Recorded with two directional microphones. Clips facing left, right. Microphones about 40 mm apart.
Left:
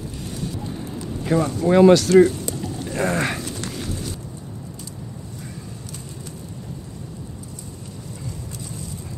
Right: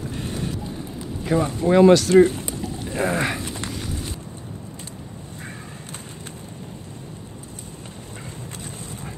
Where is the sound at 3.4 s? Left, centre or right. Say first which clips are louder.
Even; right.